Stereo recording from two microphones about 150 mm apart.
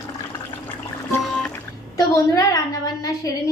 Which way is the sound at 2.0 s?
25° left (ahead or behind).